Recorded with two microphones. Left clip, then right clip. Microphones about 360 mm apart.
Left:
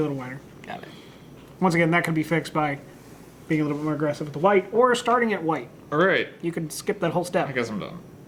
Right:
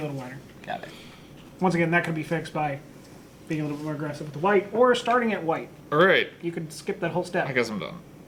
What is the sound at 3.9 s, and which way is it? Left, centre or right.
Speech, right.